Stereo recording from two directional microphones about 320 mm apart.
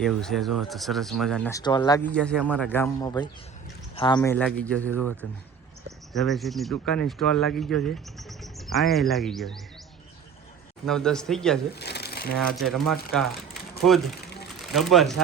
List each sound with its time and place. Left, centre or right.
0.0 s speech: centre
6.1 s speech: centre
10.8 s speech: centre
11.7 s speech: left
12.4 s speech: centre